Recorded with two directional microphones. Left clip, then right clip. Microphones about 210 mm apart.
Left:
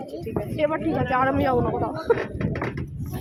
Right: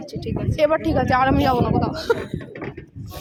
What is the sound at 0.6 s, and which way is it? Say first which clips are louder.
Speech: right 6 dB; 55° right (ahead or behind).